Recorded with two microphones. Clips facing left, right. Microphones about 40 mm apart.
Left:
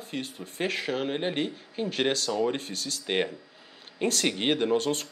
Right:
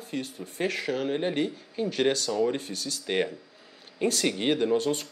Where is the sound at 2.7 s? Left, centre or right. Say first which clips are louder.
Even; left.